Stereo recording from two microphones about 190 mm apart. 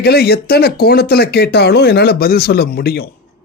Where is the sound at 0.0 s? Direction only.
55° left (ahead or behind).